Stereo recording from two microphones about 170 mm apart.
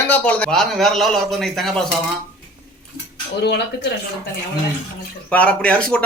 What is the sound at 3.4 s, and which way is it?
Speech, 80° left.